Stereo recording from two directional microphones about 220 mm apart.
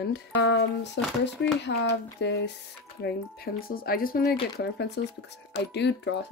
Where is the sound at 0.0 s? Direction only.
50° left (ahead or behind).